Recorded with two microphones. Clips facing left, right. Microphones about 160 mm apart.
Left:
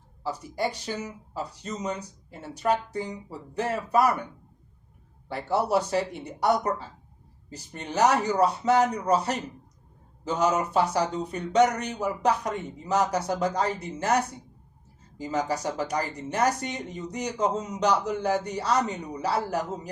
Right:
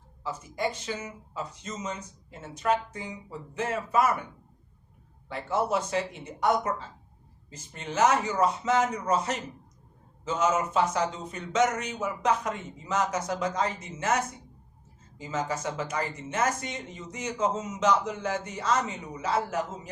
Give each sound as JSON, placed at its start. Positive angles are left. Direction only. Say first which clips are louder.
{"t": 0.2, "sound": "speech", "louder": "left 2 dB", "side_deg": 35}
{"t": 5.5, "sound": "speech", "louder": "left 3 dB", "side_deg": 35}